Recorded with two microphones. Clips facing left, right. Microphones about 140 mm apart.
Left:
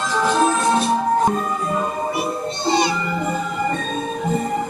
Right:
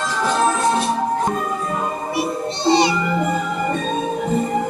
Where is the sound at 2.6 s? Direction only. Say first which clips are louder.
Right 3 dB; 25° right (ahead or behind).